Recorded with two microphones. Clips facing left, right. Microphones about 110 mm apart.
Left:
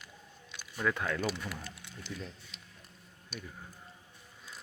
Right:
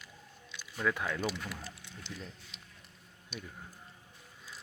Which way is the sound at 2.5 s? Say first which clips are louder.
Even; 50° left (ahead or behind).